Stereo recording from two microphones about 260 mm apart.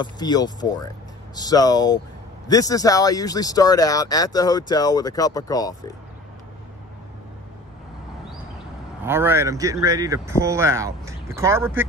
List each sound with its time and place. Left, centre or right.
0.0 s speech: centre
9.0 s speech: centre